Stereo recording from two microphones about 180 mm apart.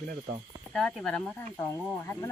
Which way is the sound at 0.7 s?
5° left (ahead or behind).